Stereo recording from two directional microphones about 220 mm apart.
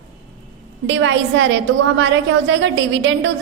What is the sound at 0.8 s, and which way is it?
A woman's voice, 55° right (ahead or behind).